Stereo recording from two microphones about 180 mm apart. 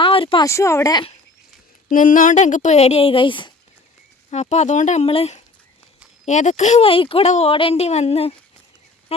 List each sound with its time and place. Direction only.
0.0 s a sound: 30° left (ahead or behind)
0.4 s speech: 15° left (ahead or behind)
1.9 s speech: 50° left (ahead or behind); by 3.5 s 25° left (ahead or behind)
4.3 s speech: 40° left (ahead or behind)